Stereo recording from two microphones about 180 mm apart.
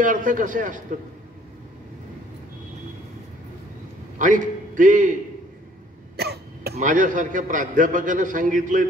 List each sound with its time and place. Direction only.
0.0 s a man's voice: 45° right (ahead or behind)
4.2 s a man's voice: 45° right (ahead or behind)
6.1 s cough: 65° right (ahead or behind)
6.8 s a man's voice: 45° right (ahead or behind)